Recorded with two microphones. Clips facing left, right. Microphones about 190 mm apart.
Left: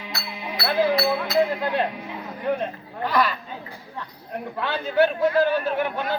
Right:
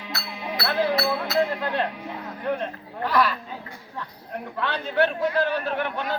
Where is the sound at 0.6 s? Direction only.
10° left (ahead or behind).